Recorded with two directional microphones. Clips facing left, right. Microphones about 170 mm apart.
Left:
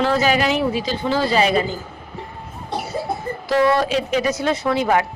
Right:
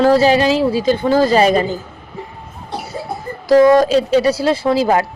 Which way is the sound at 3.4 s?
40° right (ahead or behind).